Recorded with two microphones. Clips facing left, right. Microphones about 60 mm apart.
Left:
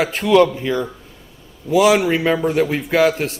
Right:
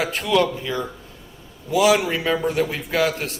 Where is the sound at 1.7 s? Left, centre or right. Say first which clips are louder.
Left 4 dB; left.